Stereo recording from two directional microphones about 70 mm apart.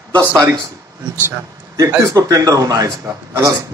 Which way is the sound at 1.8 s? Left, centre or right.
Right.